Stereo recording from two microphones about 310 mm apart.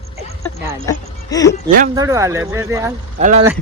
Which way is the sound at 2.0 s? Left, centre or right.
Centre.